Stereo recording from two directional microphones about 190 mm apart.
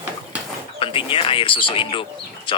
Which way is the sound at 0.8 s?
25° left (ahead or behind).